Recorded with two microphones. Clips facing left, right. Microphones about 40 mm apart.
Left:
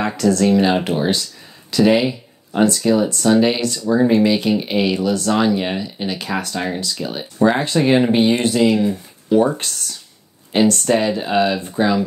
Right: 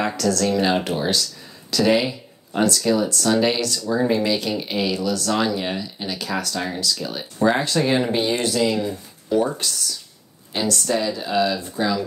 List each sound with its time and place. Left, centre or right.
0.2 s speech: left
3.3 s speech: centre
3.6 s speech: left
9.6 s speech: left
10.5 s speech: left